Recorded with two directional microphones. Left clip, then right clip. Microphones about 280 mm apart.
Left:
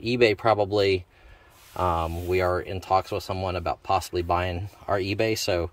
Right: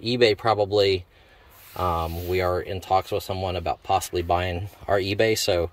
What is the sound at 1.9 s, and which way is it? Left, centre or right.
Speech, centre.